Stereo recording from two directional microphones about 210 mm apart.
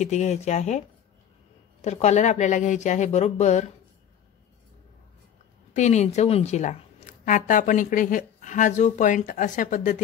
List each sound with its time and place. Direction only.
0.0 s speech: 35° left (ahead or behind)
5.8 s speech: 35° left (ahead or behind)